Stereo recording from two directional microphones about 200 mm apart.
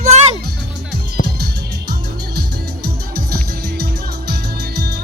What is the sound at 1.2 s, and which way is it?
Music, 50° right (ahead or behind).